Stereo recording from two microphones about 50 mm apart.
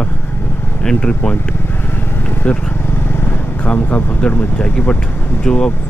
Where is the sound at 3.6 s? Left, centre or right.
Left.